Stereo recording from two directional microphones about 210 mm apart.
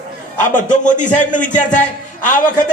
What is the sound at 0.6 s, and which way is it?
Speech, 35° left (ahead or behind).